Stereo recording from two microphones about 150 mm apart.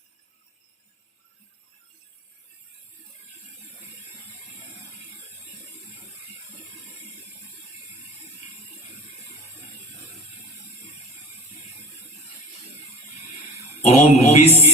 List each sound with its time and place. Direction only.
13.7 s mantra: 45° left (ahead or behind)